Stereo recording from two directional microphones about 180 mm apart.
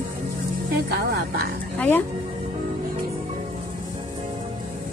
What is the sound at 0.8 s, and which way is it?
Speech, 60° right (ahead or behind).